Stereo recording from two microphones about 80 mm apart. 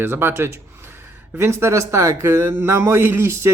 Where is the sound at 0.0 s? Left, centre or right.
Right.